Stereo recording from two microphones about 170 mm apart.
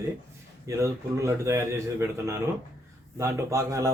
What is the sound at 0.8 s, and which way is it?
Speech, 15° right (ahead or behind).